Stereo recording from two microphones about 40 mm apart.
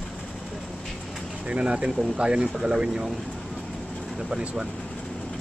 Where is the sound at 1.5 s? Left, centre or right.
Right.